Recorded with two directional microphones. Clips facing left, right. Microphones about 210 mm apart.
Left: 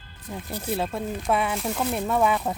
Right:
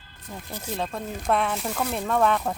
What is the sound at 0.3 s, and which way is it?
Speech, 10° left (ahead or behind).